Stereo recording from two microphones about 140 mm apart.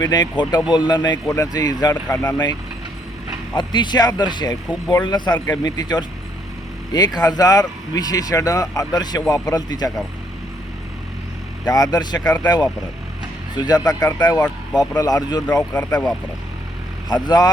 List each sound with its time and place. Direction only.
0.0 s speech: 30° left (ahead or behind)
11.7 s speech: 25° left (ahead or behind)
15.8 s speech: 10° left (ahead or behind)
17.1 s speech: 30° left (ahead or behind)